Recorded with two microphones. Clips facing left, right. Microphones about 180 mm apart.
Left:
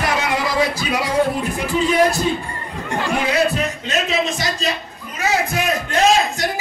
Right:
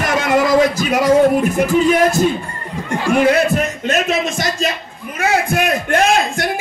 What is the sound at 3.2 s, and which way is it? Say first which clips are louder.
Music: right 6 dB; 50° right (ahead or behind).